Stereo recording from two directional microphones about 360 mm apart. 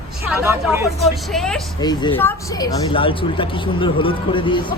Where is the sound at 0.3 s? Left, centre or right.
Centre.